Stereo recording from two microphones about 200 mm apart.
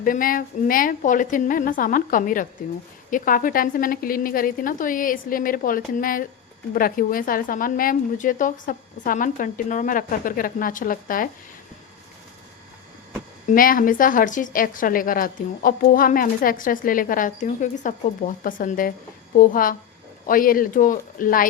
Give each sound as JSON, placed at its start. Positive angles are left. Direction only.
{"t": 0.0, "sound": "a woman's voice", "side_deg": 45}
{"t": 13.5, "sound": "a woman's voice", "side_deg": 45}